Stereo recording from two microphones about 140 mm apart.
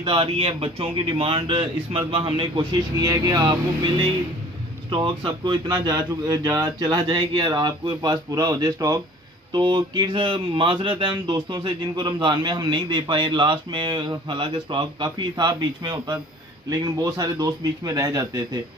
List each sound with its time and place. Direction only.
0.0 s speech: 40° right (ahead or behind)